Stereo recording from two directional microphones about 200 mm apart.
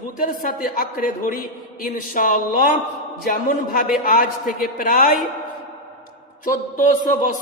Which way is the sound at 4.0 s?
45° left (ahead or behind).